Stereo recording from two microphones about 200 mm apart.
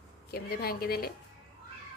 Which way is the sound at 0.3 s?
50° left (ahead or behind).